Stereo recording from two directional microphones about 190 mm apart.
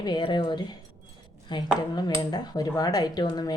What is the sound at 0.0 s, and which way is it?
Speech, 25° left (ahead or behind).